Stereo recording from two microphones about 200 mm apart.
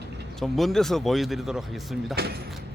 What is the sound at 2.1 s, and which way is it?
Speech, 55° right (ahead or behind).